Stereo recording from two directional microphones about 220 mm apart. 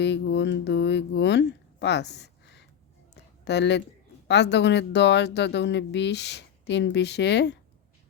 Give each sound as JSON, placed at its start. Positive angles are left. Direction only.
{"t": 0.0, "sound": "speech", "side_deg": 55}